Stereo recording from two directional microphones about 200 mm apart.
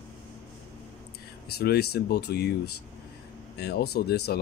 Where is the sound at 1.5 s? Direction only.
50° left (ahead or behind).